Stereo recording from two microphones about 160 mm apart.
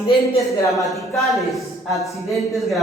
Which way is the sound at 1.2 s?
Centre (ahead or behind).